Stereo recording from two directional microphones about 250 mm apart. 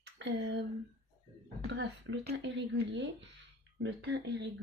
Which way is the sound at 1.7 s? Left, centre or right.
Right.